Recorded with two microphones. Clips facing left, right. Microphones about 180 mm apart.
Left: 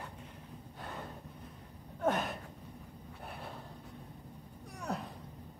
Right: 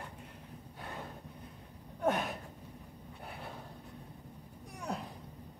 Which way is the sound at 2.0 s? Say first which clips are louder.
Even; centre (ahead or behind).